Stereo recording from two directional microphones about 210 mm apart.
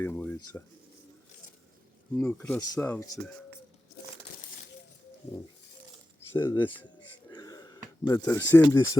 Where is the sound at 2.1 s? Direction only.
10° left (ahead or behind).